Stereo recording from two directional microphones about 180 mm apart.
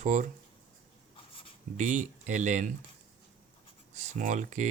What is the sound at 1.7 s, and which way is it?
Speech, 45° right (ahead or behind).